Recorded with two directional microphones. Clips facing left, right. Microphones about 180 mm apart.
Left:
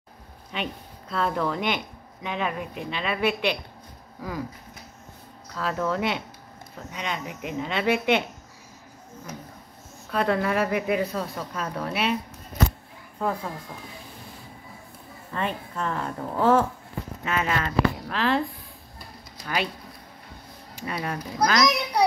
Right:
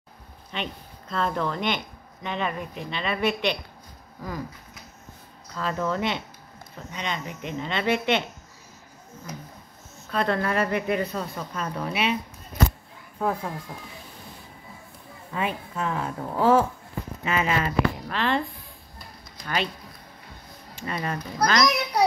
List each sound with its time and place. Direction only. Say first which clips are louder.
0.5 s a woman's voice: left 1 dB; 5° left (ahead or behind)
5.5 s a woman's voice: even; 5° left (ahead or behind)
10.1 s a woman's voice: left 1 dB; 5° left (ahead or behind)
13.2 s a woman's voice: right 1 dB; 10° right (ahead or behind)
15.3 s a woman's voice: right 1 dB; 5° right (ahead or behind)
19.4 s speech: even; 5° left (ahead or behind)
20.8 s a woman's voice: even; 5° left (ahead or behind)